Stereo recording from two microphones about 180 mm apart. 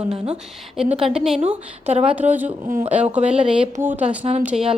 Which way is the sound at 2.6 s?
45° right (ahead or behind).